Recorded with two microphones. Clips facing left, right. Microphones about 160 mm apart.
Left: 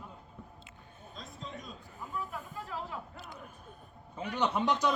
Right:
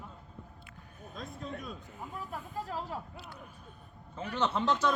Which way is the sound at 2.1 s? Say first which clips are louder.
Even; 40° right (ahead or behind).